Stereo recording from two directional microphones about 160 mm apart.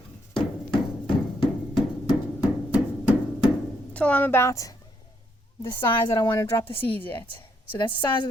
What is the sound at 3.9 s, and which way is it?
Speech, 10° left (ahead or behind).